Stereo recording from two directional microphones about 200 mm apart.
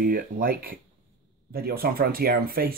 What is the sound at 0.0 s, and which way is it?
Speech, 45° right (ahead or behind).